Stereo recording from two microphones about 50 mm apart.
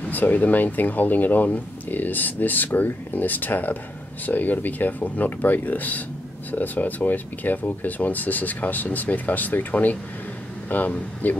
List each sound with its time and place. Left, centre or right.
0.1 s speech: left